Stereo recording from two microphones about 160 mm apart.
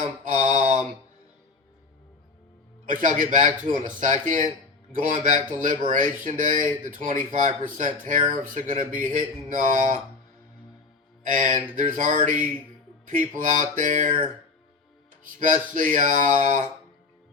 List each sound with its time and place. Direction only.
0.3 s mantra: 50° right (ahead or behind)
2.8 s speech: 55° right (ahead or behind)
11.3 s speech: 55° right (ahead or behind)
15.4 s speech: 55° right (ahead or behind)